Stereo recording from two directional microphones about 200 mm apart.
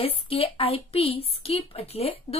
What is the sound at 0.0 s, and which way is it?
A woman's voice, 30° left (ahead or behind).